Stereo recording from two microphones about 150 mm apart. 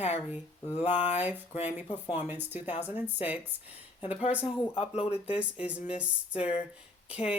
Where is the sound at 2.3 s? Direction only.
10° right (ahead or behind).